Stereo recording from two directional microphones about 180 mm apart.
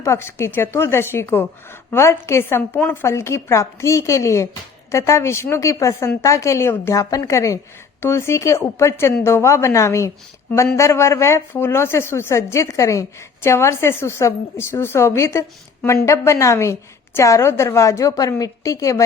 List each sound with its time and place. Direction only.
0.0 s a woman's voice: 15° left (ahead or behind)